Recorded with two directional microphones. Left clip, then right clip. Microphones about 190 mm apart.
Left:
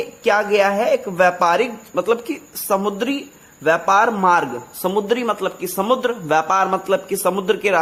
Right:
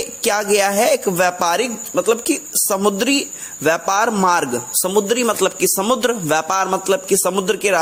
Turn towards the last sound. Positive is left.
turn(degrees=-20)  # may be behind; listen again after turning